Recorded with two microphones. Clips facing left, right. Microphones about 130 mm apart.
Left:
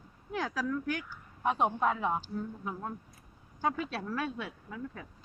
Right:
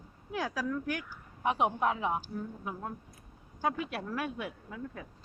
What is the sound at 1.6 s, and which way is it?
A woman's voice, 5° right (ahead or behind).